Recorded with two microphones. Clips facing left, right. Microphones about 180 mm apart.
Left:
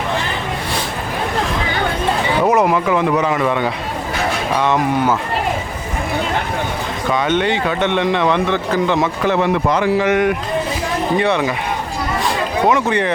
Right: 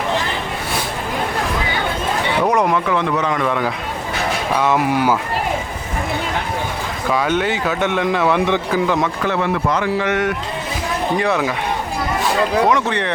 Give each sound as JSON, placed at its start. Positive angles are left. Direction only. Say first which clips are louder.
{"t": 2.4, "sound": "speech", "louder": "left 2 dB", "side_deg": 5}
{"t": 4.5, "sound": "speech", "louder": "even", "side_deg": -5}
{"t": 7.1, "sound": "speech", "louder": "left 1 dB", "side_deg": -5}
{"t": 8.4, "sound": "speech", "louder": "even", "side_deg": -15}
{"t": 9.2, "sound": "speech", "louder": "left 3 dB", "side_deg": 20}
{"t": 11.2, "sound": "speech", "louder": "left 2 dB", "side_deg": 0}
{"t": 12.6, "sound": "speech", "louder": "left 2 dB", "side_deg": 5}